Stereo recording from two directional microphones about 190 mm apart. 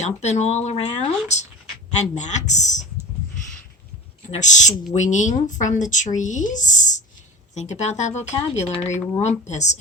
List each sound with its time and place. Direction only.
0.0 s speech: 35° left (ahead or behind)
4.3 s speech: 40° left (ahead or behind)